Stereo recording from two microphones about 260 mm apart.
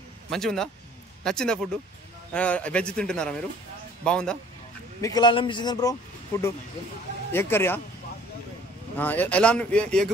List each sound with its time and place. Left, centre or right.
0.3 s speech: centre
5.0 s a man's voice: centre
8.9 s speech: centre